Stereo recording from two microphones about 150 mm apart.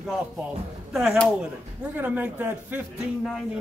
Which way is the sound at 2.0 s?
10° right (ahead or behind).